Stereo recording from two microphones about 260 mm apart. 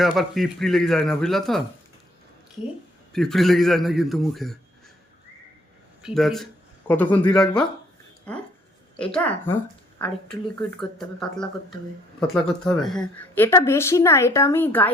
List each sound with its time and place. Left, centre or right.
0.0 s speech: centre
3.1 s speech: centre
6.0 s speech: centre
9.0 s speech: centre
12.8 s a woman's voice: centre